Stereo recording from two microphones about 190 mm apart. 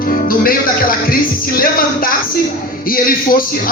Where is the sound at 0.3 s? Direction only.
50° left (ahead or behind).